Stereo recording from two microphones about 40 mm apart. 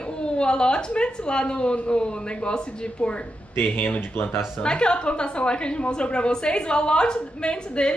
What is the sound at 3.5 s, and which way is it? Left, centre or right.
Speech, left.